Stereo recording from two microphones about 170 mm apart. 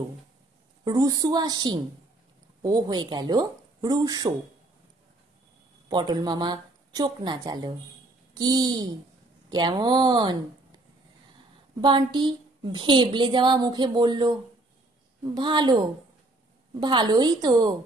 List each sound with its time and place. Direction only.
0.8 s a woman's voice: 25° right (ahead or behind)
5.9 s a woman's voice: 25° right (ahead or behind)
11.8 s a woman's voice: 25° right (ahead or behind)
15.3 s a woman's voice: 25° right (ahead or behind)
16.8 s a woman's voice: 25° right (ahead or behind)